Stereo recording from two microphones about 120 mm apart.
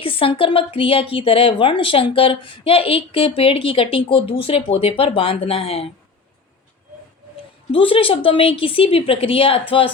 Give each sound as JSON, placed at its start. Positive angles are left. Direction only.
{"t": 0.0, "sound": "a woman's voice", "side_deg": 50}
{"t": 7.7, "sound": "a woman's voice", "side_deg": 50}